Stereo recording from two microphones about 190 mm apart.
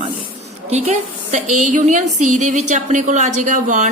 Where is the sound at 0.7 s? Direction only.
35° right (ahead or behind).